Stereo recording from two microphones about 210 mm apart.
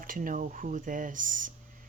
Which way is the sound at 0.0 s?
40° right (ahead or behind).